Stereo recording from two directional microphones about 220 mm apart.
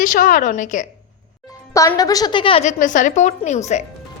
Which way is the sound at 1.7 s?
15° left (ahead or behind).